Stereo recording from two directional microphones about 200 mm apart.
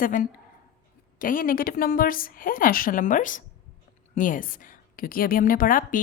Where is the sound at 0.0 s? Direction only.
40° left (ahead or behind).